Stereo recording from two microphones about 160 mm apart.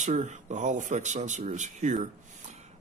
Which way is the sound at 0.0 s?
45° right (ahead or behind).